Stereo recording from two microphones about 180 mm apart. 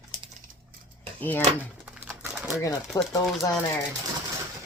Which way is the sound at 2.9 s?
20° left (ahead or behind).